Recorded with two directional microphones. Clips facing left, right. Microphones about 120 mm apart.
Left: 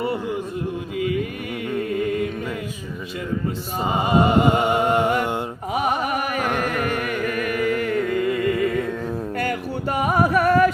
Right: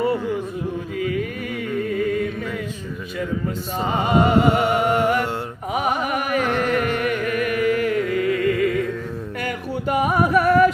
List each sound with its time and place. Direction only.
3.8 s music: 15° left (ahead or behind)
6.5 s music: 10° left (ahead or behind)
6.9 s music: 40° left (ahead or behind)
8.1 s music: 25° left (ahead or behind)
10.3 s a sound: 45° left (ahead or behind)